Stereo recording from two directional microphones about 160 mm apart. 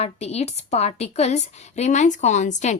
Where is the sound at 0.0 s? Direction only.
40° left (ahead or behind).